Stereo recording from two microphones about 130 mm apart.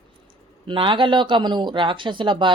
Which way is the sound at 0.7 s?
40° right (ahead or behind).